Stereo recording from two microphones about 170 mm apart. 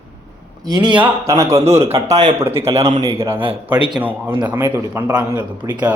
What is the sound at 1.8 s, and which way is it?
Speech, 40° right (ahead or behind).